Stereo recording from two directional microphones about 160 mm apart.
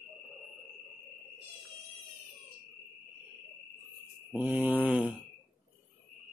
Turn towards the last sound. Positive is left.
turn(degrees=-10)  # may be behind; listen again after turning